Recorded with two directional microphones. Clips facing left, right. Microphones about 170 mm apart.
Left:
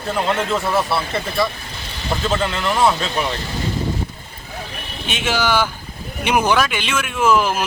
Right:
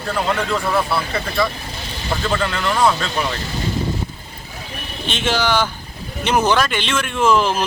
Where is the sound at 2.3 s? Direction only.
20° left (ahead or behind).